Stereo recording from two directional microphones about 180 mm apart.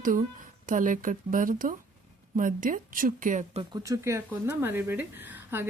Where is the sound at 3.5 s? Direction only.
25° right (ahead or behind).